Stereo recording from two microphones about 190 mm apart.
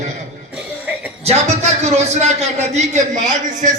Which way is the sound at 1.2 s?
35° right (ahead or behind).